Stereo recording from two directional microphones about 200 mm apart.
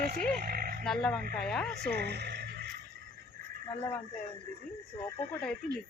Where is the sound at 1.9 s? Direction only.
55° right (ahead or behind).